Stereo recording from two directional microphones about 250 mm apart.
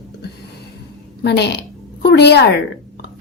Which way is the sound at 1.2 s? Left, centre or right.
Left.